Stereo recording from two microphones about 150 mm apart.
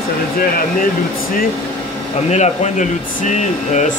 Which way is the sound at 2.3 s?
50° left (ahead or behind).